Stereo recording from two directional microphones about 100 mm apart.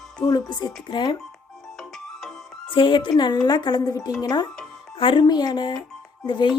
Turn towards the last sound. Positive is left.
turn(degrees=50)  # may be behind; listen again after turning